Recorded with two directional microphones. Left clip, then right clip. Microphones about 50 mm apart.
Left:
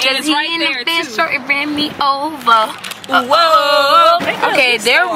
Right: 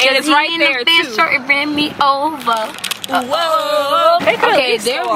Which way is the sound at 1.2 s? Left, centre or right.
Centre.